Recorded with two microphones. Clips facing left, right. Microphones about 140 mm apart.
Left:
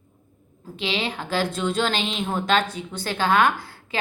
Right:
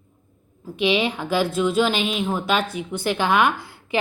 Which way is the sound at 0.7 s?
15° right (ahead or behind).